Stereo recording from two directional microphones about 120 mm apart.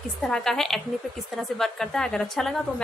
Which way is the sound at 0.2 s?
5° left (ahead or behind).